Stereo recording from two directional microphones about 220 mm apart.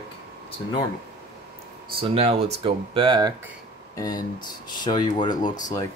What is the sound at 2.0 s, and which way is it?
Speech, 30° right (ahead or behind).